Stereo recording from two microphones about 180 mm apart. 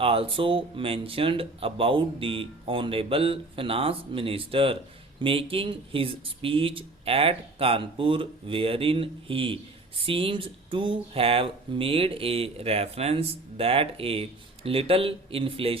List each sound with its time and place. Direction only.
0.0 s speech: 30° right (ahead or behind)